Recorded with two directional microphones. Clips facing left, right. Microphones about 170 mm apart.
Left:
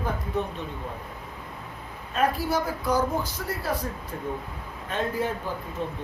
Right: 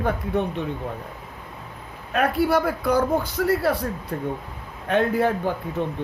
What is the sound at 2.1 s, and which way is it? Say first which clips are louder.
Speech: right 5 dB; 60° right (ahead or behind).